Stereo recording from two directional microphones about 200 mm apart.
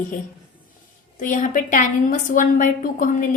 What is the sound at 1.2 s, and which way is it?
A woman's voice, 40° left (ahead or behind).